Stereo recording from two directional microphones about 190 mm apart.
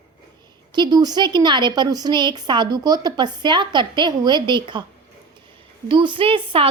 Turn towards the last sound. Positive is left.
turn(degrees=-30)  # may be behind; listen again after turning